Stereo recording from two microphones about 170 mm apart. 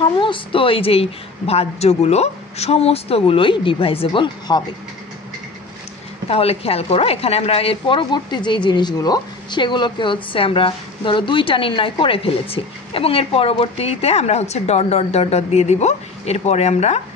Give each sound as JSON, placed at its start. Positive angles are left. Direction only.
{"t": 0.0, "sound": "a woman's voice", "side_deg": 30}
{"t": 6.2, "sound": "a woman's voice", "side_deg": 35}